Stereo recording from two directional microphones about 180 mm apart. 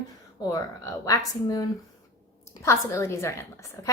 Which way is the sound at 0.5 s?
20° left (ahead or behind).